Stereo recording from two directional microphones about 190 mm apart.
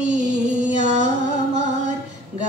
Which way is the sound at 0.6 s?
40° right (ahead or behind).